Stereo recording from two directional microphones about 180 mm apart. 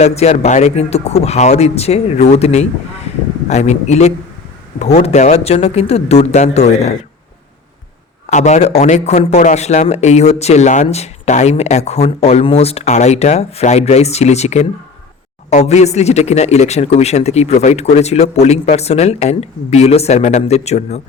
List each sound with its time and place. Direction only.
0.0 s a man's voice: 35° left (ahead or behind)
8.3 s a man's voice: 40° left (ahead or behind)